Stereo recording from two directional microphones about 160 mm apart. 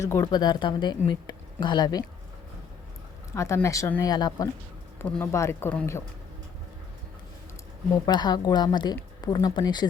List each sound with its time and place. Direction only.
0.0 s speech: 15° left (ahead or behind)
3.3 s speech: 15° left (ahead or behind)
4.9 s speech: 10° left (ahead or behind)
8.0 s speech: 25° left (ahead or behind)